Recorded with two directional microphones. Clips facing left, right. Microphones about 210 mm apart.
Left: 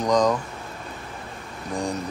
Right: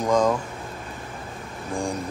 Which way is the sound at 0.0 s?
5° right (ahead or behind).